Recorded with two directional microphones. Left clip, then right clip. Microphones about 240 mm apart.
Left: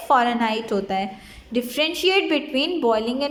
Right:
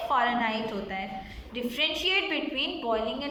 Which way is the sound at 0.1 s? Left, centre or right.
Left.